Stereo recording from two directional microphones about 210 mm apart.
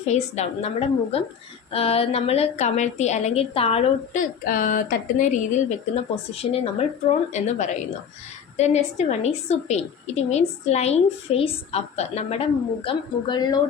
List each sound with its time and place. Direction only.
0.0 s a woman's voice: 30° left (ahead or behind)